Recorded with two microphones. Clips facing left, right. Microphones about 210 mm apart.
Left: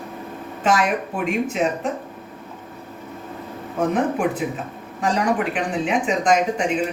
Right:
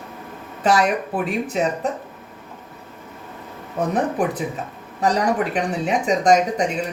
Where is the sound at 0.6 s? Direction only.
35° right (ahead or behind).